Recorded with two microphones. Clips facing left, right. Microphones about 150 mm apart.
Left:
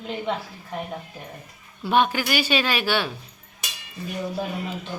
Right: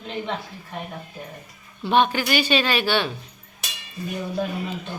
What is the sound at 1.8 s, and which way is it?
Speech, 10° left (ahead or behind).